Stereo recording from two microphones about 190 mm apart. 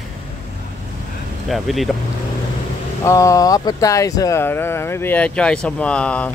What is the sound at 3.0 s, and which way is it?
Speech, 15° left (ahead or behind).